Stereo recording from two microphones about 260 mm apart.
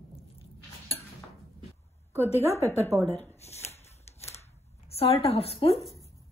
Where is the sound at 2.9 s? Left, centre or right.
Centre.